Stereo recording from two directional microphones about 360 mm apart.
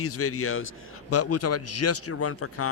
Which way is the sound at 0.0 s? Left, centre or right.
Left.